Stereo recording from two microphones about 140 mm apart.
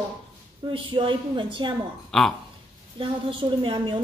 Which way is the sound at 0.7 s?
35° right (ahead or behind).